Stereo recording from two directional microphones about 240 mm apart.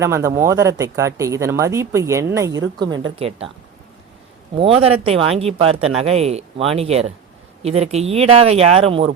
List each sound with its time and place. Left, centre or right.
0.0 s speech: centre
4.5 s speech: right